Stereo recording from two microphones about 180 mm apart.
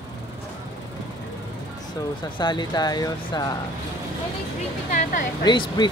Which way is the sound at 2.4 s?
25° left (ahead or behind).